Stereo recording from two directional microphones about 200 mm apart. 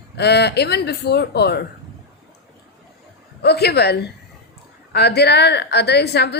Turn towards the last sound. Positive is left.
turn(degrees=55)  # may be behind; listen again after turning